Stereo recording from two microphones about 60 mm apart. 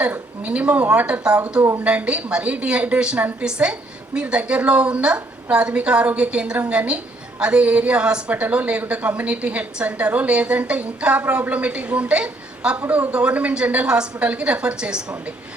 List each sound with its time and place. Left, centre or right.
0.0 s a woman's voice: right